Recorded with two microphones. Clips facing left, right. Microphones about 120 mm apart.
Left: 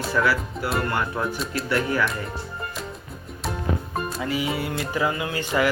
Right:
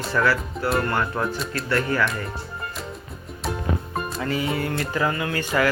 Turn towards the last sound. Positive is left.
turn(degrees=15)  # may be behind; listen again after turning